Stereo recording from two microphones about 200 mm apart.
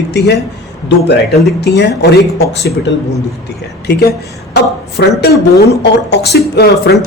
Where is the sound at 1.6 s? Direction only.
60° left (ahead or behind).